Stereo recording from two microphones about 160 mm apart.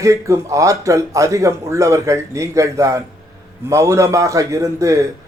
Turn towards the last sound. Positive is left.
turn(degrees=-20)  # may be behind; listen again after turning